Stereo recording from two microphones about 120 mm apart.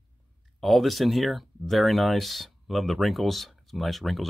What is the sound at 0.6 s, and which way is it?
Speech, centre (ahead or behind).